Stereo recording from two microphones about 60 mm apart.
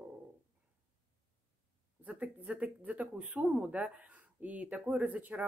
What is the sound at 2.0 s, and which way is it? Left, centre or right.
Speech, right.